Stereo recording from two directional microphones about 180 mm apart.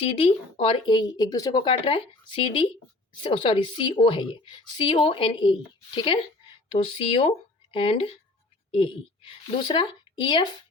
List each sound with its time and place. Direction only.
0.0 s a woman's voice: 30° left (ahead or behind)